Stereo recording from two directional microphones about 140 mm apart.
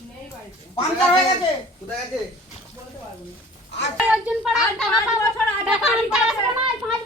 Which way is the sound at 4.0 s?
5° right (ahead or behind).